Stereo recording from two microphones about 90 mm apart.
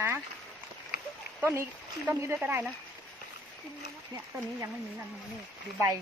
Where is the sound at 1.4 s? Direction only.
25° right (ahead or behind).